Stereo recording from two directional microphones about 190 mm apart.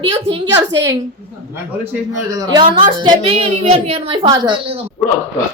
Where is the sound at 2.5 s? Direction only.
25° right (ahead or behind).